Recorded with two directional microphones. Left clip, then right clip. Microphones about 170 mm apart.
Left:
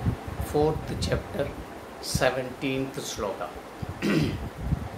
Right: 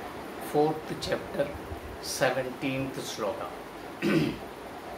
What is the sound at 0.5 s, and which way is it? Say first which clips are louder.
Speech: left 1 dB; 20° left (ahead or behind).